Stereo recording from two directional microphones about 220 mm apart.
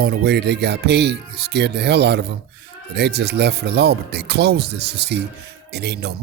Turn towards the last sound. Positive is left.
turn(degrees=-50)  # may be behind; listen again after turning